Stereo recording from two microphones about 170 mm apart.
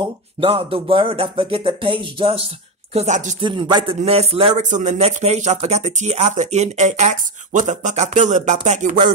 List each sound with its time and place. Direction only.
0.0 s speech: 35° right (ahead or behind)
3.3 s speech: 30° right (ahead or behind); by 9.0 s 45° right (ahead or behind)